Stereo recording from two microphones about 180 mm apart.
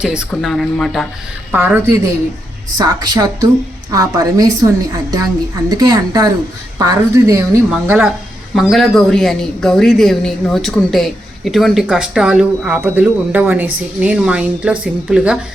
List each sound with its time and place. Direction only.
0.0 s a man's voice: 5° right (ahead or behind)
1.5 s a woman's voice: 15° right (ahead or behind)